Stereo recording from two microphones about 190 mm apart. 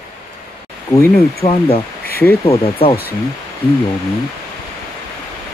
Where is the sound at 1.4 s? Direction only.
20° left (ahead or behind).